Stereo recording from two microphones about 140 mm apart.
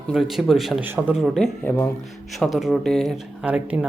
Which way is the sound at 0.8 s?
15° right (ahead or behind).